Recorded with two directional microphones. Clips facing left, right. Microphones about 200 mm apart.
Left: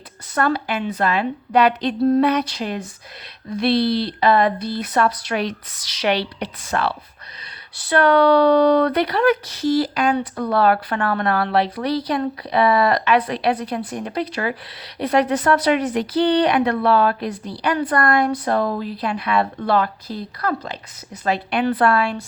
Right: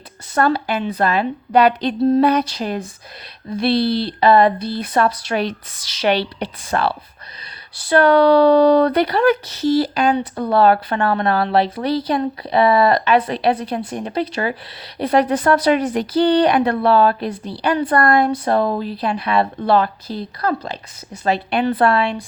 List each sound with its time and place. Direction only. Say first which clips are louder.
0.3 s speech: right 3 dB; 30° right (ahead or behind)